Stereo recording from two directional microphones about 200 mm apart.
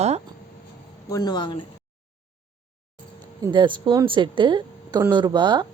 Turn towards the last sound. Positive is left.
turn(degrees=-20)  # may be behind; listen again after turning